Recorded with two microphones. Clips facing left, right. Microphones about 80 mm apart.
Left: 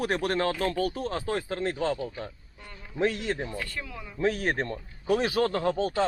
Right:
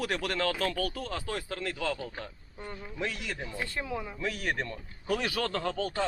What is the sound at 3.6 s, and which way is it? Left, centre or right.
Speech, right.